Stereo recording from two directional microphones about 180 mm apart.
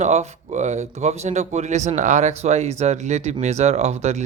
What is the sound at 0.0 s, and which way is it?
Speech, 40° right (ahead or behind).